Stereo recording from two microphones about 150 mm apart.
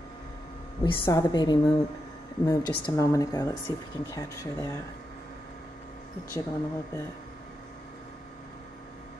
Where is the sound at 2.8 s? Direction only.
20° left (ahead or behind).